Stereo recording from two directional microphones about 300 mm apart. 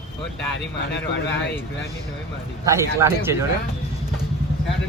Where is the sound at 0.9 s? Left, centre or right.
Left.